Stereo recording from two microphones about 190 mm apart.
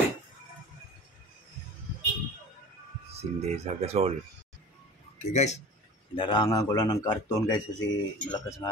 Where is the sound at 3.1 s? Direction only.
35° right (ahead or behind).